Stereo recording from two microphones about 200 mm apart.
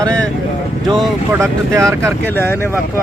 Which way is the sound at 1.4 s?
15° right (ahead or behind).